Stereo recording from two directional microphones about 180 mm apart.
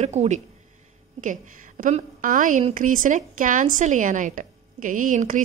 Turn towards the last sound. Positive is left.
turn(degrees=-45)  # may be behind; listen again after turning